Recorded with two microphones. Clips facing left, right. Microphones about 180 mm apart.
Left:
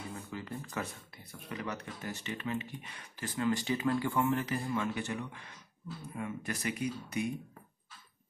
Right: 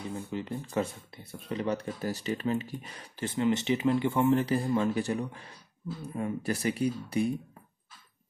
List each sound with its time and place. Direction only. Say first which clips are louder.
0.1 s speech: right 6 dB; 25° right (ahead or behind)